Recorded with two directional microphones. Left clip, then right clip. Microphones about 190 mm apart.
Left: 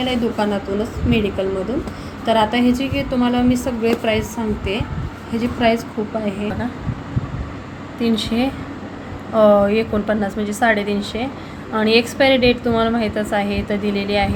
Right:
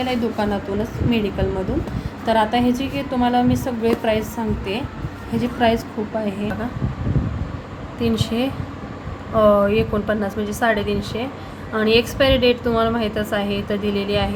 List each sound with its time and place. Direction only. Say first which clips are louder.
0.0 s a woman's voice: left 2 dB; 5° right (ahead or behind)
8.0 s a woman's voice: left 2 dB; 5° right (ahead or behind)